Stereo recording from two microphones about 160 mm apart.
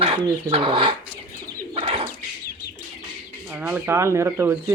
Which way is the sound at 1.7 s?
35° right (ahead or behind).